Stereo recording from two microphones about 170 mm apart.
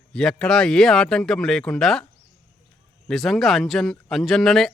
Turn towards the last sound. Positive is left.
turn(degrees=0)  # may be behind; listen again after turning